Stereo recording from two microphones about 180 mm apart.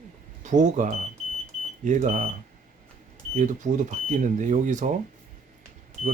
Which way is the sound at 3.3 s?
45° right (ahead or behind).